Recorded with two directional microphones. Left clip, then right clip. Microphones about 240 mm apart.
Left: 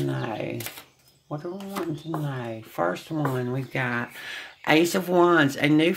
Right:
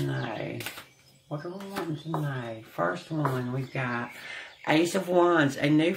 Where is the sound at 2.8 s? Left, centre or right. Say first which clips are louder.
Left 2 dB; left.